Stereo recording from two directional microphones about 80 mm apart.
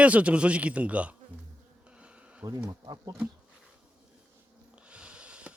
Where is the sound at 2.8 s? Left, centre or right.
Right.